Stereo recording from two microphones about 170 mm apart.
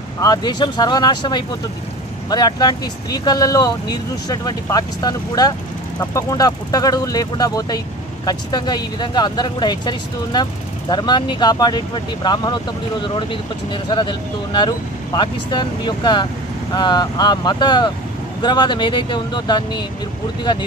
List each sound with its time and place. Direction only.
0.2 s speech: 25° left (ahead or behind)